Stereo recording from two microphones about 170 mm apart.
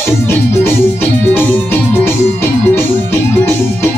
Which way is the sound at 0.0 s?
15° left (ahead or behind).